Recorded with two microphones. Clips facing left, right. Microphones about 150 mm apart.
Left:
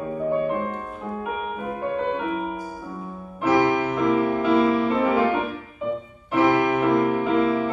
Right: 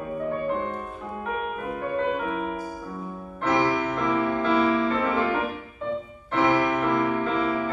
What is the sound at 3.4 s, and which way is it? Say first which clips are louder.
Music: left 4 dB; 5° left (ahead or behind).